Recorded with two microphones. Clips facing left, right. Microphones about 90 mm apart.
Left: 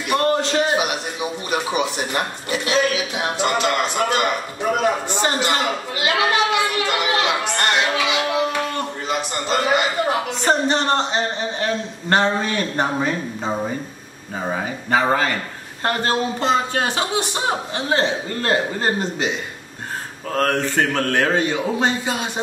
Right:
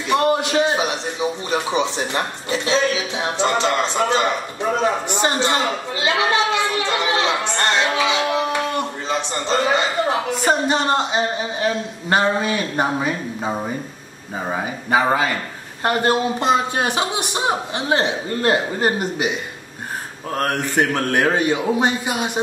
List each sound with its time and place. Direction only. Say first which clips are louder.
0.1 s a sound: right 1 dB; 15° right (ahead or behind)
0.7 s speech: right 1 dB; 30° right (ahead or behind)
6.7 s a sound: even; 30° right (ahead or behind)
9.1 s speech: right 1 dB; 30° right (ahead or behind)
10.3 s a man's voice: even; 10° right (ahead or behind)
20.3 s a man's voice: left 1 dB; 15° right (ahead or behind)